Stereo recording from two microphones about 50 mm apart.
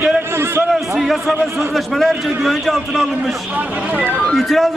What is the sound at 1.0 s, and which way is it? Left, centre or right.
A man's voice, centre.